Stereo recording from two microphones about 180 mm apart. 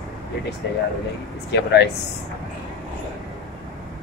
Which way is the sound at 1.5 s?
75° left (ahead or behind).